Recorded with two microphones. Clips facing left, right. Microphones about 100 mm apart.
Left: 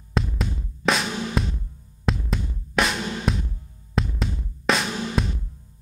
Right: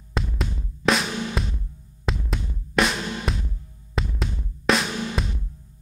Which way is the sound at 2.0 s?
Centre (ahead or behind).